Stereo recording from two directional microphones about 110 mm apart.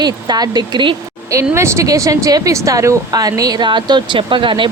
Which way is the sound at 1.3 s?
25° right (ahead or behind).